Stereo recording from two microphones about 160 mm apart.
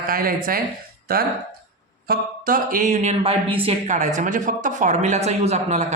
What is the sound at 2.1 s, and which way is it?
Speech, 60° right (ahead or behind).